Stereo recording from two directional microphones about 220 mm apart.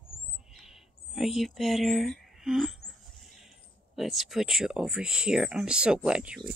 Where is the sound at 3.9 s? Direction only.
Centre (ahead or behind).